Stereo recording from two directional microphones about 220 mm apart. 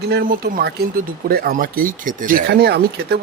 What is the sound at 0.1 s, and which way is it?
Speech, 50° right (ahead or behind).